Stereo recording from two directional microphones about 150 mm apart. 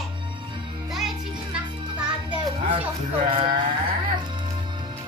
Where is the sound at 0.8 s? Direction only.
Centre (ahead or behind).